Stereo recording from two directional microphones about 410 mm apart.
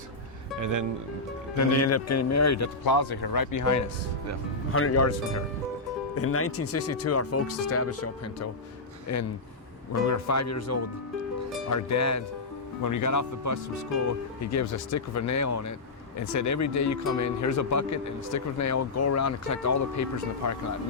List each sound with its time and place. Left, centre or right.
0.6 s speech: right
1.5 s speech: left
2.8 s speech: left
4.7 s speech: left
6.1 s speech: left